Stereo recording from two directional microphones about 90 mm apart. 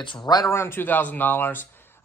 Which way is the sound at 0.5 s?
25° left (ahead or behind).